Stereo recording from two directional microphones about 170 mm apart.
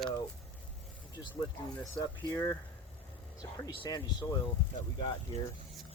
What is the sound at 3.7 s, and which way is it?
Speech, 25° left (ahead or behind).